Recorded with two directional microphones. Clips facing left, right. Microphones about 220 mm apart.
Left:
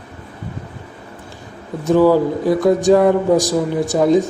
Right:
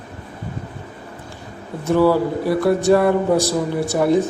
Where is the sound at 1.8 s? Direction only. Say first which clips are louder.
Left 3 dB; 15° left (ahead or behind).